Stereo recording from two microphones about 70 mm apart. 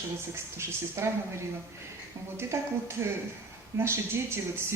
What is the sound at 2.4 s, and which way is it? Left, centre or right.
Speech, right.